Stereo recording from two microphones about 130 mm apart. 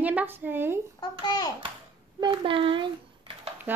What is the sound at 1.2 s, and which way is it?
Speech, 30° left (ahead or behind).